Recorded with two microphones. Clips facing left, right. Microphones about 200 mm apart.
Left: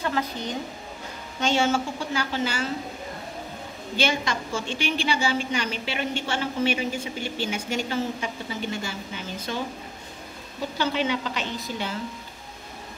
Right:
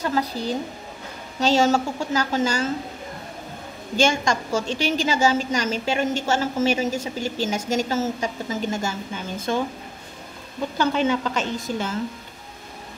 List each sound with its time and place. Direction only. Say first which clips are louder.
0.0 s a woman's voice: right 3 dB; 35° right (ahead or behind)
3.9 s a woman's voice: right 5 dB; 45° right (ahead or behind)
10.8 s a woman's voice: right 4 dB; 45° right (ahead or behind)